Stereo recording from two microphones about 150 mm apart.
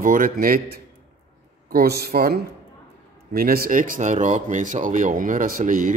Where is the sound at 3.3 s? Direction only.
80° right.